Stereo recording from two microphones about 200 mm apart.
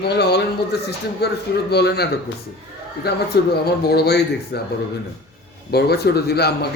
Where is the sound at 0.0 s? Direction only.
55° left (ahead or behind).